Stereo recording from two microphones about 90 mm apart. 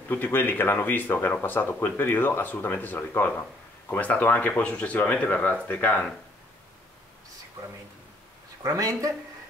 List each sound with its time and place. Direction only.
0.1 s speech: 25° left (ahead or behind)
8.6 s speech: 40° right (ahead or behind)